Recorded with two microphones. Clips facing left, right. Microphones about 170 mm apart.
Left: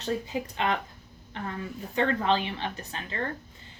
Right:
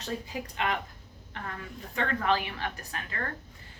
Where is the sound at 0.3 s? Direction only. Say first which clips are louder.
Left 3 dB; 25° left (ahead or behind).